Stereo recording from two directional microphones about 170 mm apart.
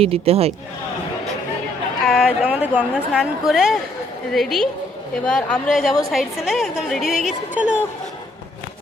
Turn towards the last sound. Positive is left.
turn(degrees=-5)  # may be behind; listen again after turning